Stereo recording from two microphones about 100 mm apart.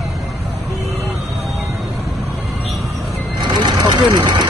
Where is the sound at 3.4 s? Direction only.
50° right (ahead or behind).